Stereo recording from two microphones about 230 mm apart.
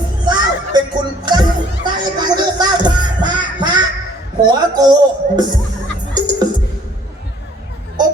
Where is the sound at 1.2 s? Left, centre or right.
Centre.